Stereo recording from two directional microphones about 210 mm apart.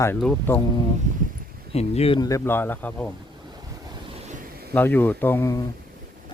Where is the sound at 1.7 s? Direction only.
30° left (ahead or behind); by 3.1 s 10° left (ahead or behind).